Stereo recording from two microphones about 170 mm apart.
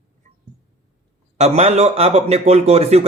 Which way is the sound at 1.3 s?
40° right (ahead or behind).